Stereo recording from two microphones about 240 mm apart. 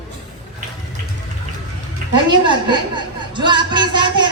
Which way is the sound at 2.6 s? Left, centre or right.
Centre.